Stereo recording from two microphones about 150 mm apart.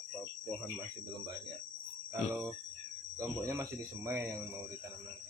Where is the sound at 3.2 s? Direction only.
20° right (ahead or behind).